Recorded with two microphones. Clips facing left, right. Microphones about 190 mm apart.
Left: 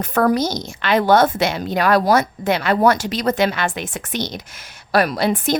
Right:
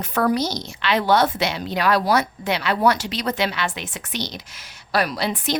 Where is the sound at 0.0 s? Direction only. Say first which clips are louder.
Left 4 dB; 50° left (ahead or behind).